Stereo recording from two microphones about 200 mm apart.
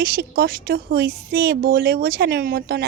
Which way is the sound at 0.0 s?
50° right (ahead or behind).